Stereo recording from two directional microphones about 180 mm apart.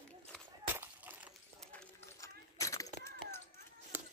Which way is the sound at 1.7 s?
15° left (ahead or behind).